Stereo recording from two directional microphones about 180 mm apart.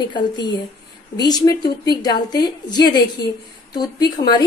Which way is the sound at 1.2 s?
20° left (ahead or behind).